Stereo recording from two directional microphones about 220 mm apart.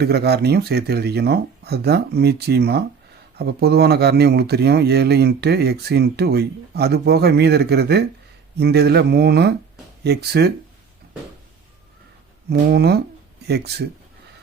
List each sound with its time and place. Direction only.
0.0 s speech: 45° right (ahead or behind)
12.5 s speech: 50° right (ahead or behind)